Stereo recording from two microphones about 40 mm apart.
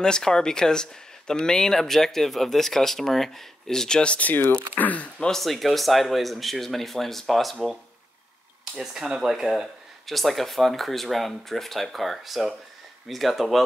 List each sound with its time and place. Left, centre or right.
0.0 s speech: centre
4.2 s speech: left
5.3 s speech: centre
8.7 s speech: centre